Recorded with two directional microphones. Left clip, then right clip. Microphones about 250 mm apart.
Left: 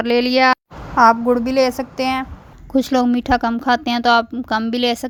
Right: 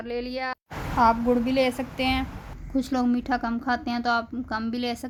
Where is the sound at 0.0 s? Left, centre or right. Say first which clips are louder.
Left 16 dB; left.